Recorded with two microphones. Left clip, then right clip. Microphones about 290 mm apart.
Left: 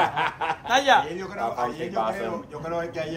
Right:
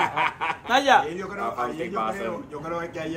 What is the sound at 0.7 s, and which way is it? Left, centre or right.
A man's voice, centre.